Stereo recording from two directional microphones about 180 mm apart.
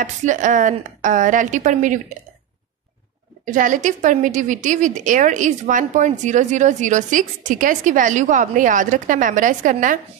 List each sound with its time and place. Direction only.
0.0 s a woman's voice: 45° right (ahead or behind)
3.4 s a woman's voice: 45° right (ahead or behind)